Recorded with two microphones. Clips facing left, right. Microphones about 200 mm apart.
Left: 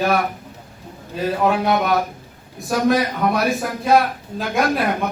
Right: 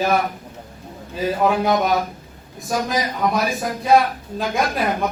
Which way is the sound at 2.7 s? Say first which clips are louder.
Left 5 dB; 65° left (ahead or behind).